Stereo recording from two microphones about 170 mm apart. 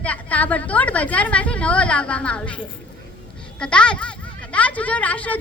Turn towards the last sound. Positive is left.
turn(degrees=10)  # may be behind; listen again after turning